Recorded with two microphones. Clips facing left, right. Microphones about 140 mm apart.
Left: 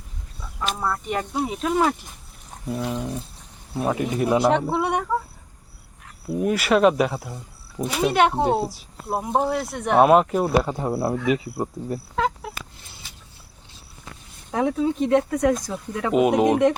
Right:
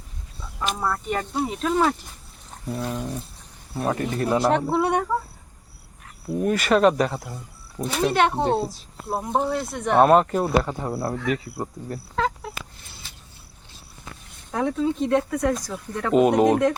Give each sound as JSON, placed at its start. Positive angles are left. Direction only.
{"t": 0.9, "sound": "speech", "side_deg": 0}
{"t": 6.3, "sound": "speech", "side_deg": 5}
{"t": 14.5, "sound": "speech", "side_deg": 10}
{"t": 15.2, "sound": "speech", "side_deg": 15}
{"t": 16.0, "sound": "speech", "side_deg": 5}